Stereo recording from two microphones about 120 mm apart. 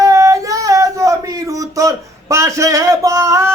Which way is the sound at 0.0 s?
30° right (ahead or behind).